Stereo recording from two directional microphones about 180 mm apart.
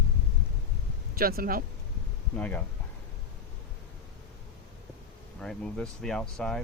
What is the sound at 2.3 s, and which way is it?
Speech, 10° left (ahead or behind).